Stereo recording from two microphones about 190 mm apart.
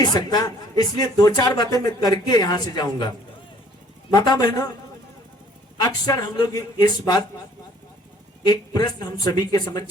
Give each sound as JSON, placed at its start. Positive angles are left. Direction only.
{"t": 0.0, "sound": "speech", "side_deg": 20}
{"t": 4.1, "sound": "speech", "side_deg": 20}
{"t": 5.8, "sound": "speech", "side_deg": 20}
{"t": 8.4, "sound": "speech", "side_deg": 20}